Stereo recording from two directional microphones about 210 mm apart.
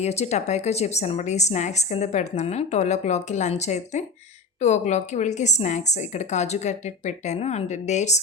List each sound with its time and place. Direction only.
0.0 s a woman's voice: 30° left (ahead or behind)